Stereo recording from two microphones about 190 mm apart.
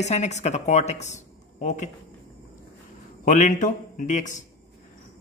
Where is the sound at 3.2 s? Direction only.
40° left (ahead or behind).